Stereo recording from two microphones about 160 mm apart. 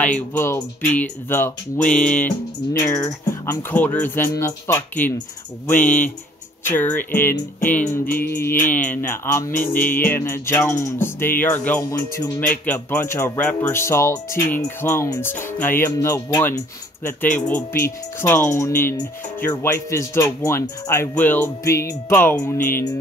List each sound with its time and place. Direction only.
0.0 s music: 10° left (ahead or behind)